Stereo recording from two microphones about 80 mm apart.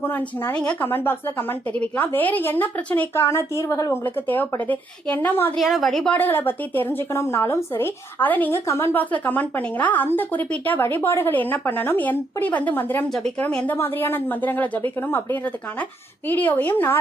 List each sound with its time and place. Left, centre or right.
0.0 s speech: left
0.8 s speech: left
3.2 s a woman's voice: left
4.0 s speech: left
5.5 s a woman's voice: centre
6.1 s speech: left
8.5 s a woman's voice: left
8.9 s speech: left